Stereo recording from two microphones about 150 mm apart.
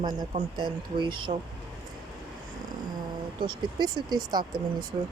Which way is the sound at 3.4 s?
30° right (ahead or behind).